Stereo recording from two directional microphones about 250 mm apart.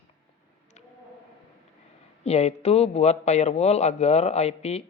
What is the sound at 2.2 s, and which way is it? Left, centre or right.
A man's voice, left.